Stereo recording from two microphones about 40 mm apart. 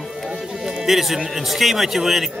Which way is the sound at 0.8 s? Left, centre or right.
Centre.